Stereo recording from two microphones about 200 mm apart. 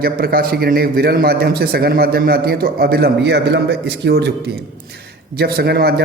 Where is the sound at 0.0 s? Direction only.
50° right (ahead or behind).